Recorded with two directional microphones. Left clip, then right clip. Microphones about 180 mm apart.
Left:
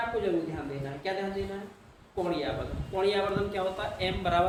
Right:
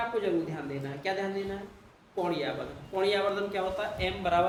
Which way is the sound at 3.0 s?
30° right (ahead or behind).